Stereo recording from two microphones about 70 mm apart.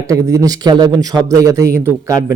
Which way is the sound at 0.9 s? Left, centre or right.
Right.